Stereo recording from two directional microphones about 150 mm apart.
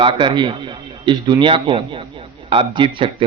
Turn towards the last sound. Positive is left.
turn(degrees=-35)  # may be behind; listen again after turning